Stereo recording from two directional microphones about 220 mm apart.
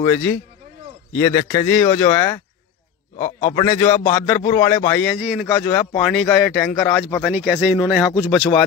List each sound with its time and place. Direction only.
0.0 s speech: 10° left (ahead or behind)
3.4 s speech: 10° left (ahead or behind)
5.2 s a man's voice: 5° right (ahead or behind)
5.5 s a man's voice: 10° left (ahead or behind)